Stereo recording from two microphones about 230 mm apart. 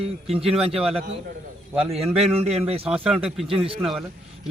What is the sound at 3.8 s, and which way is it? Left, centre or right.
Speech, centre.